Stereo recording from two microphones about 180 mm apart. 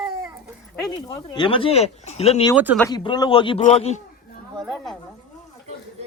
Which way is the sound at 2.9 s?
25° left (ahead or behind).